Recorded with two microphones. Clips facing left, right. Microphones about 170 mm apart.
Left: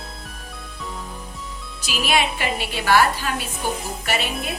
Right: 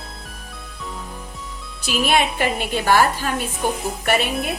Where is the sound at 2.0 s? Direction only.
50° right (ahead or behind).